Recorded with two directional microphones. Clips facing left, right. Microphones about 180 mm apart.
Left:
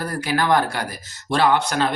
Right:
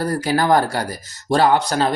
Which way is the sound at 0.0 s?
40° right (ahead or behind).